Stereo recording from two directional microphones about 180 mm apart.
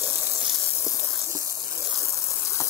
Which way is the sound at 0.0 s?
15° right (ahead or behind).